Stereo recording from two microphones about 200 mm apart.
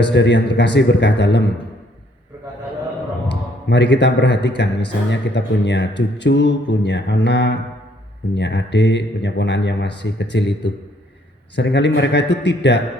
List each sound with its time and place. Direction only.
0.1 s a man's voice: 60° left (ahead or behind)
3.2 s a man's voice: 60° left (ahead or behind)